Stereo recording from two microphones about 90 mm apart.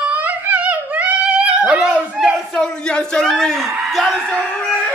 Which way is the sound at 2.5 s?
5° left (ahead or behind).